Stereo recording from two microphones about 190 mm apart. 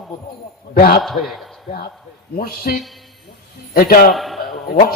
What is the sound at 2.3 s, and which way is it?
Speech, 50° left (ahead or behind).